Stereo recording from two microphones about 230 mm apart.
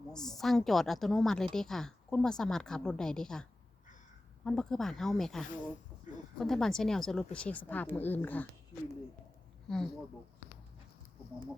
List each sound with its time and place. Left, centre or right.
0.1 s a woman's voice: centre
4.4 s a woman's voice: centre